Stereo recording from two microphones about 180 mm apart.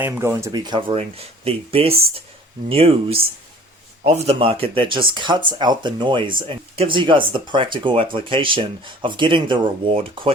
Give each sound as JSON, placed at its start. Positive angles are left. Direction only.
{"t": 0.0, "sound": "speech", "side_deg": -15}